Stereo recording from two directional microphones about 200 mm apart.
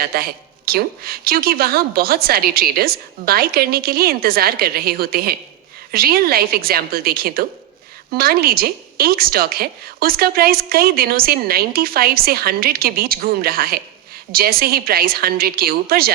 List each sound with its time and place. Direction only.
0.0 s a woman's voice: 50° right (ahead or behind)